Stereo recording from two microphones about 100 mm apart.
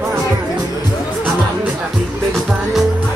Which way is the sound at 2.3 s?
Centre (ahead or behind).